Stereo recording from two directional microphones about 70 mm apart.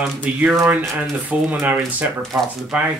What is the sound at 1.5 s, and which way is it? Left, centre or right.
Speech, right.